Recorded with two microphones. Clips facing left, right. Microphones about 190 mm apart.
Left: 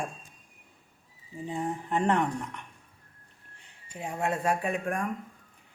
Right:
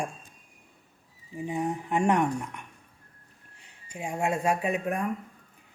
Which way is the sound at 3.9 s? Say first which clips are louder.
Right 2 dB; 10° right (ahead or behind).